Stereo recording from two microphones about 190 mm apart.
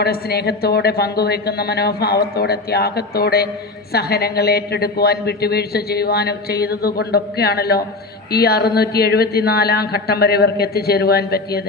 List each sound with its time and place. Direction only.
0.0 s a woman's voice: 55° left (ahead or behind)